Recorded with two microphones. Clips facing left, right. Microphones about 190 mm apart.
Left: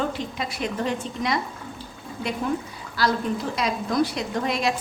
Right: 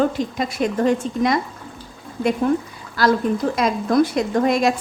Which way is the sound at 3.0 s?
50° right (ahead or behind).